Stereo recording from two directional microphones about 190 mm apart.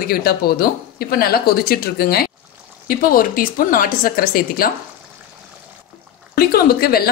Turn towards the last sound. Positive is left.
turn(degrees=55)  # may be behind; listen again after turning